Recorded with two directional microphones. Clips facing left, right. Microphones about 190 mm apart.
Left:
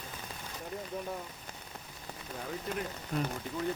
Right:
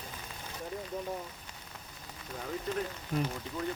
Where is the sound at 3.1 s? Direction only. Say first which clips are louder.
Right 1 dB; centre (ahead or behind).